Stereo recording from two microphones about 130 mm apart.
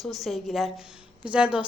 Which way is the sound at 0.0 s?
Centre (ahead or behind).